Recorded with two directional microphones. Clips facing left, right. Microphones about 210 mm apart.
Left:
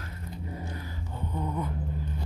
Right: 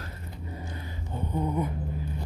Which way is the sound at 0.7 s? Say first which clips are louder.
Right 1 dB; 20° right (ahead or behind).